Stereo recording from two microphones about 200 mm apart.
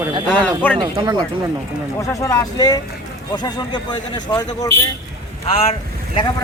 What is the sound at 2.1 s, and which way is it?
A man's voice, 15° left (ahead or behind).